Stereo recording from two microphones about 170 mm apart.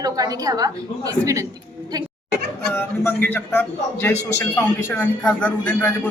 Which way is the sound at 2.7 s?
10° left (ahead or behind).